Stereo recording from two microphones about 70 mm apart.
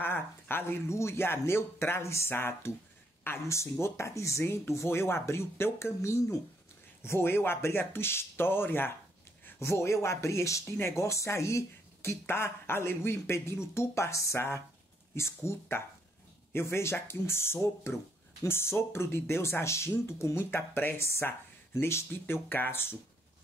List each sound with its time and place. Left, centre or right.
0.0 s speech: left
7.0 s speech: left
9.6 s speech: left